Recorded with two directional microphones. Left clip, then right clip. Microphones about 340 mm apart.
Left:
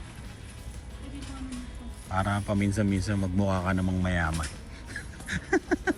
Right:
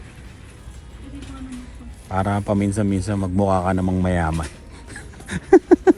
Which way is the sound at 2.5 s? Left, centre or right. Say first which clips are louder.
Right 7 dB; right.